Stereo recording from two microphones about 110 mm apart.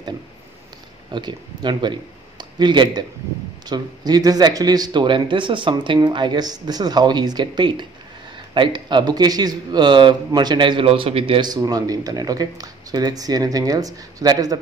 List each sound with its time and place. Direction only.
1.1 s a man's voice: 45° right (ahead or behind)
11.4 s speech: 35° right (ahead or behind)